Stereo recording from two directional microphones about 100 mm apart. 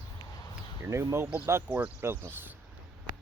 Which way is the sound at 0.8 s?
30° right (ahead or behind).